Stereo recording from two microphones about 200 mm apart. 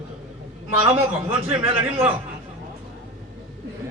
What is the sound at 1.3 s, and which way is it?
Speech, 25° right (ahead or behind).